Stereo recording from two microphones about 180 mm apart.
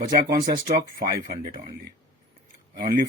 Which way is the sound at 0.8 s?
50° right (ahead or behind).